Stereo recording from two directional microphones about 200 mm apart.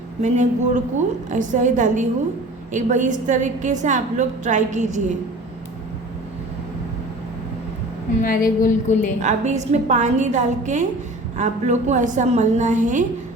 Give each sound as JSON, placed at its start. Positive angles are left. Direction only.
{"t": 0.2, "sound": "a woman's voice", "side_deg": -35}
{"t": 8.2, "sound": "a woman's voice", "side_deg": 45}
{"t": 9.2, "sound": "a woman's voice", "side_deg": -35}